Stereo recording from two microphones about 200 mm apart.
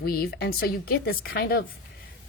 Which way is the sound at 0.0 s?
50° left (ahead or behind).